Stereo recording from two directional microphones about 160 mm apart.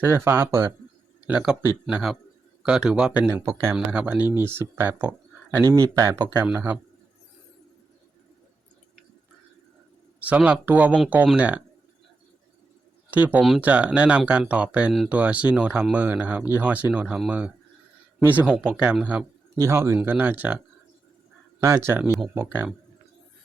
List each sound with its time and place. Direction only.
0.0 s speech: 15° right (ahead or behind)
10.2 s speech: 10° right (ahead or behind)
13.1 s speech: 10° right (ahead or behind)
19.5 s speech: 15° right (ahead or behind)
21.6 s speech: 15° right (ahead or behind)